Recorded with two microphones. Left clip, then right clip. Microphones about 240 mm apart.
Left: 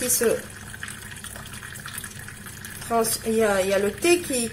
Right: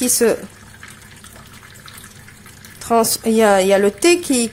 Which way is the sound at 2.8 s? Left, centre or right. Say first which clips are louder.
Right 8 dB; right.